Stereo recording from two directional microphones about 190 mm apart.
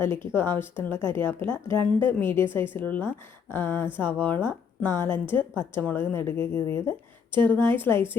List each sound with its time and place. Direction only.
0.0 s speech: 15° left (ahead or behind)
7.3 s a woman's voice: 25° right (ahead or behind)
7.8 s speech: 10° left (ahead or behind)